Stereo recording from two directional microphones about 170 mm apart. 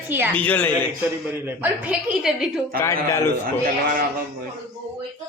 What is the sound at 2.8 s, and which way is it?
Speech, 15° left (ahead or behind).